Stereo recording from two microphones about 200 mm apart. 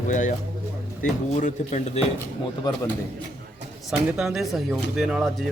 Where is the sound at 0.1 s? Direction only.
40° left (ahead or behind).